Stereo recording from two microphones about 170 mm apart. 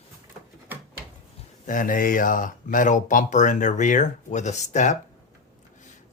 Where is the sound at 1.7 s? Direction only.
50° left (ahead or behind).